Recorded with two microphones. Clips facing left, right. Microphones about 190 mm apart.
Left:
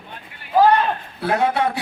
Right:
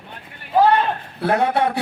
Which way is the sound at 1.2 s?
55° right (ahead or behind).